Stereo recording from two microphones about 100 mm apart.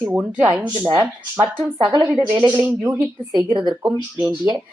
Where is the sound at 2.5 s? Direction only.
20° right (ahead or behind).